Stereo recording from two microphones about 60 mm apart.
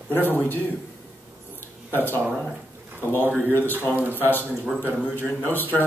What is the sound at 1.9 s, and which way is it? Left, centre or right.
Speech, left.